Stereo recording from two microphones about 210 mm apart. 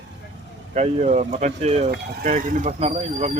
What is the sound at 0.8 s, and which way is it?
Speech, 35° right (ahead or behind).